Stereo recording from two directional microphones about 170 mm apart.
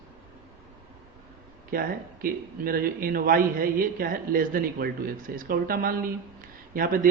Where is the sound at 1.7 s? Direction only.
60° right (ahead or behind).